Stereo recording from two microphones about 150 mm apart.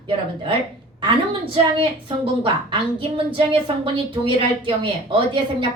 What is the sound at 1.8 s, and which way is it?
A woman's voice, 35° right (ahead or behind).